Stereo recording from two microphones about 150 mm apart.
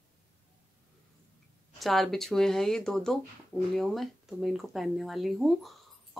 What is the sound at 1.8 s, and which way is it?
Speech, centre (ahead or behind).